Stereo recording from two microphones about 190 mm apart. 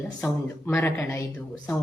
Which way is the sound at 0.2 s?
10° left (ahead or behind).